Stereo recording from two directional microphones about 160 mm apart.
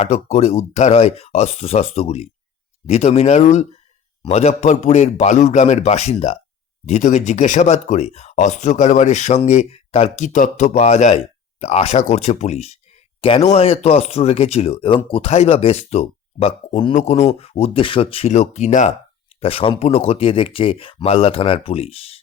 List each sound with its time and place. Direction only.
0.0 s speech: 45° left (ahead or behind)
19.4 s speech: 35° left (ahead or behind)